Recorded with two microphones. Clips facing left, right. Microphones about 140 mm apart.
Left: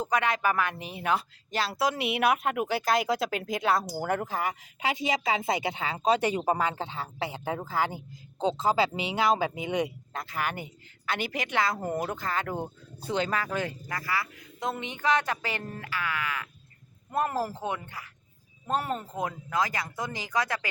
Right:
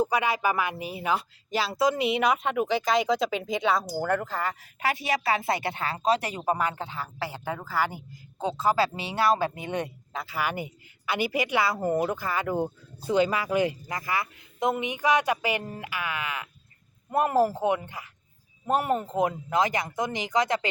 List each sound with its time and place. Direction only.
0.0 s a woman's voice: 5° right (ahead or behind); by 9.9 s 10° left (ahead or behind)
10.2 s a woman's voice: 10° right (ahead or behind)